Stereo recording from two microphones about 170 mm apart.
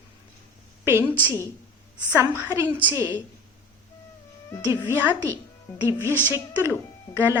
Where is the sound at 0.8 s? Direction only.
15° right (ahead or behind).